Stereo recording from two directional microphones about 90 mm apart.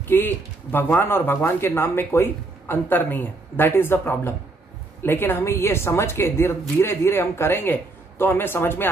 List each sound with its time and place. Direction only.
0.0 s speech: 20° left (ahead or behind)